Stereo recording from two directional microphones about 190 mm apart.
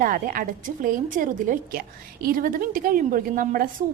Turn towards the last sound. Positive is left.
turn(degrees=-45)  # may be behind; listen again after turning